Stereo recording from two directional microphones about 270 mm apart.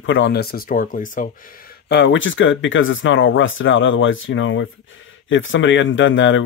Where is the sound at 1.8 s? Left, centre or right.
Left.